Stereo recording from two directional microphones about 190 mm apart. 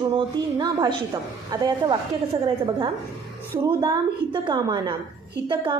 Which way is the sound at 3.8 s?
25° right (ahead or behind).